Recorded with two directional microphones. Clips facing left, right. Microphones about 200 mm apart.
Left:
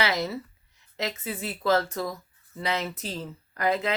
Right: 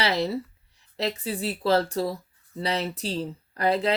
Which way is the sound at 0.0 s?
35° right (ahead or behind).